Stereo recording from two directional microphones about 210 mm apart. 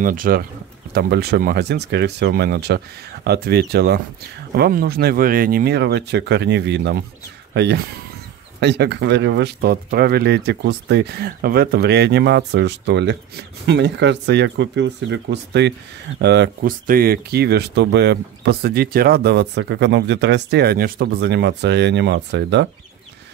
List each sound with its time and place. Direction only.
0.0 s speech: 40° right (ahead or behind)